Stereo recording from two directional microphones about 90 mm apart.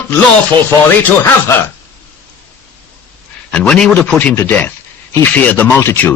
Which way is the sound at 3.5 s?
10° left (ahead or behind).